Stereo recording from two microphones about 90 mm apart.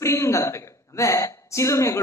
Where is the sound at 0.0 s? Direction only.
30° left (ahead or behind).